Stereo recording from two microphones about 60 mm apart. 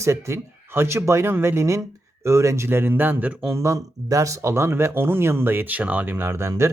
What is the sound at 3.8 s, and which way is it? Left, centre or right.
Speech, right.